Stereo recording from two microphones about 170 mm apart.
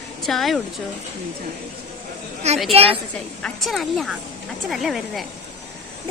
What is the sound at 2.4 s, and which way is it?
Speech, 40° right (ahead or behind).